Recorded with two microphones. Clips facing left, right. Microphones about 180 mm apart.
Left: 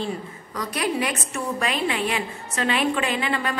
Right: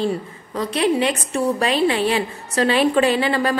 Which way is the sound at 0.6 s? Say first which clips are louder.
Right 6 dB; 25° right (ahead or behind).